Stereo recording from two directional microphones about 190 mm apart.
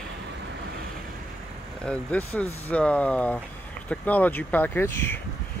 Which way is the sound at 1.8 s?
5° left (ahead or behind).